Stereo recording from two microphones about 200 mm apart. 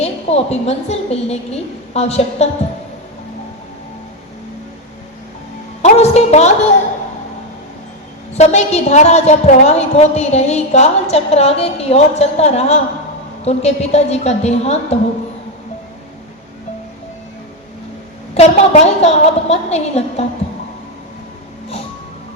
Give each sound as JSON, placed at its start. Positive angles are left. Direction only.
{"t": 0.0, "sound": "a woman's voice", "side_deg": 30}
{"t": 5.8, "sound": "music", "side_deg": 30}
{"t": 8.4, "sound": "a woman's voice", "side_deg": 30}
{"t": 18.3, "sound": "a woman's voice", "side_deg": 35}